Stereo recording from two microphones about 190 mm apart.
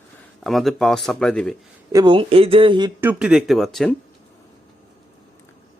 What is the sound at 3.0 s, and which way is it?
Speech, 10° right (ahead or behind).